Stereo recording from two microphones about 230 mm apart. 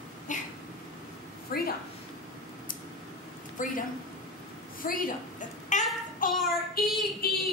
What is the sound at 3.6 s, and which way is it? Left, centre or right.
Speech, left.